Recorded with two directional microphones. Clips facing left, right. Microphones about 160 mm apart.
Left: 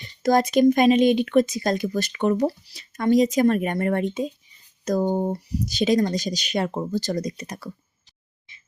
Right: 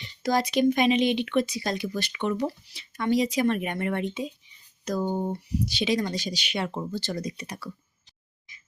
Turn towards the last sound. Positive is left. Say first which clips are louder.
# left 3 dB
turn(degrees=45)  # may be behind; listen again after turning